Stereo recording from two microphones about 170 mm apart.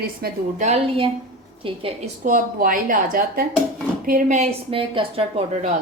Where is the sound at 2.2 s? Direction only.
50° right (ahead or behind).